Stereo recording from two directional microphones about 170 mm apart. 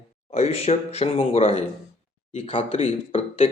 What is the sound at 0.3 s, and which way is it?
Speech, 35° left (ahead or behind).